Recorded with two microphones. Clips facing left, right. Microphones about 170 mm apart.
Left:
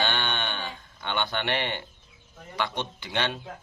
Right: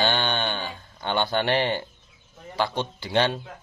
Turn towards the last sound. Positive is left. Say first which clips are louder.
# right 7 dB
turn(degrees=-35)  # may be behind; listen again after turning